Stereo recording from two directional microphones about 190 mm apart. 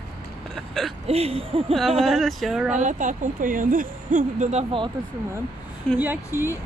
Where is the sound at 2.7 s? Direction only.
40° right (ahead or behind).